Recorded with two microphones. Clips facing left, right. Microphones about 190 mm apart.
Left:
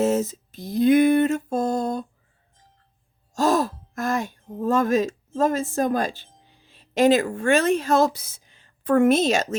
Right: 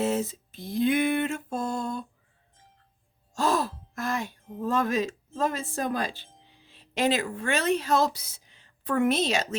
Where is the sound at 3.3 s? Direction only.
45° left (ahead or behind).